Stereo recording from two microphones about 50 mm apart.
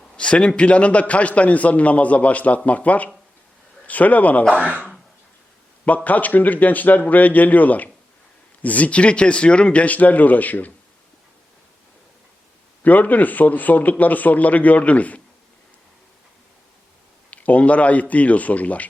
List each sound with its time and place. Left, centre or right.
0.2 s a man's voice: left
6.1 s a man's voice: left
12.8 s a man's voice: left
17.3 s a man's voice: left